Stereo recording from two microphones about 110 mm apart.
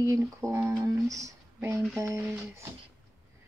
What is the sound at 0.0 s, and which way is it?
A woman's voice, 30° right (ahead or behind).